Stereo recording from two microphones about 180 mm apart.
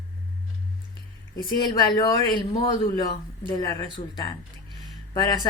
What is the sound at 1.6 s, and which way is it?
Speech, 25° left (ahead or behind).